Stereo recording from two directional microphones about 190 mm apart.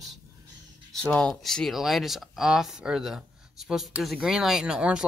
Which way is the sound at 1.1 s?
Centre (ahead or behind).